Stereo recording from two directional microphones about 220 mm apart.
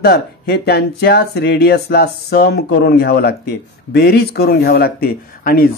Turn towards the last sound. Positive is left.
turn(degrees=40)  # may be behind; listen again after turning